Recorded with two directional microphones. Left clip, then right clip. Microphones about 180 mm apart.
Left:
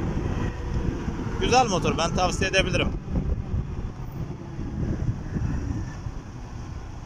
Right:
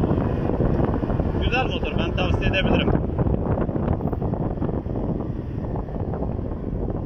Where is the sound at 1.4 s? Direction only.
25° left (ahead or behind).